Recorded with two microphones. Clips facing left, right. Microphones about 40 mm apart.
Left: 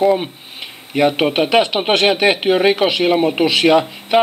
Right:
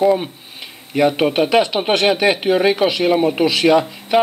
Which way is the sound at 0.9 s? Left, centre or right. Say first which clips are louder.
Even; left.